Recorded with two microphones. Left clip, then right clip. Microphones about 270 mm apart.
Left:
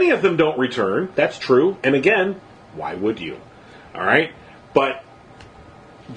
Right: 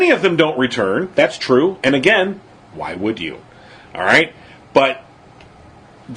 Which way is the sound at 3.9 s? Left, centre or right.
Right.